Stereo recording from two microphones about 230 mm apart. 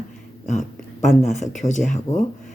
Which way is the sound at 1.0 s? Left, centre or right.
Left.